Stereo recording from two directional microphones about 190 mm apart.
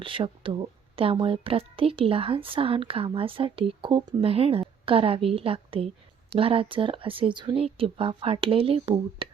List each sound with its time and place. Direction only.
0.0 s a woman's voice: 25° right (ahead or behind)